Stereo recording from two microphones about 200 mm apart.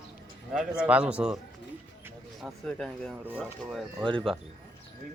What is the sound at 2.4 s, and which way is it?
Speech, centre (ahead or behind).